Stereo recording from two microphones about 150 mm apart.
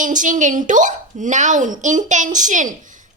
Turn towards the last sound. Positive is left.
turn(degrees=-60)  # may be behind; listen again after turning